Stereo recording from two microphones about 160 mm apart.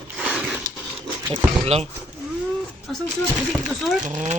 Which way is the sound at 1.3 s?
40° right (ahead or behind).